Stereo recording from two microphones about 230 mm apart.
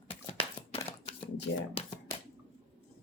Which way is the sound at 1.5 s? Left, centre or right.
Left.